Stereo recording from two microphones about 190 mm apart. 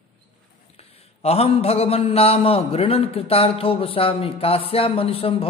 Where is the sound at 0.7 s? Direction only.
30° left (ahead or behind).